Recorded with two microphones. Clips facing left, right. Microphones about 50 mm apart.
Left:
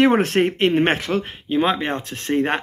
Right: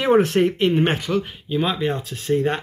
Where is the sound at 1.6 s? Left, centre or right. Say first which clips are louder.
Left 1 dB; left.